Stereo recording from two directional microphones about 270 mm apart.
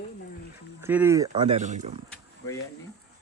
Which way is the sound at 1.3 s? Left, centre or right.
Right.